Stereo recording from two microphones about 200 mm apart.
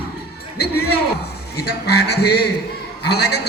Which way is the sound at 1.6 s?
55° left (ahead or behind).